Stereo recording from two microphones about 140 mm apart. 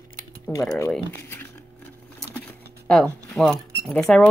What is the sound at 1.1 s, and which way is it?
Crumpling, 15° left (ahead or behind).